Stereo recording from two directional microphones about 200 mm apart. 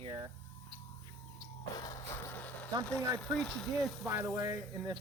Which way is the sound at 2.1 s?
10° left (ahead or behind).